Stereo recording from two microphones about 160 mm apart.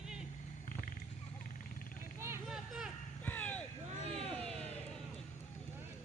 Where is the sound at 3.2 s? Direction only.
10° left (ahead or behind).